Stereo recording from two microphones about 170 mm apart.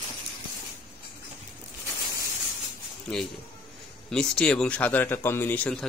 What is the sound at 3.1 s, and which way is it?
A man's voice, 5° left (ahead or behind).